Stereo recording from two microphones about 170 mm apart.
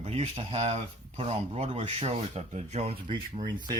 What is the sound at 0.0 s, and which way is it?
Speech, 35° right (ahead or behind).